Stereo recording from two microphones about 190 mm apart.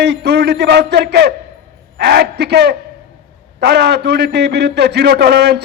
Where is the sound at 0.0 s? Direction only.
60° right (ahead or behind).